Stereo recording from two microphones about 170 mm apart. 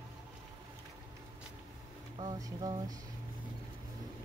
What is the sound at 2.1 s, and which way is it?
Speech, 20° right (ahead or behind).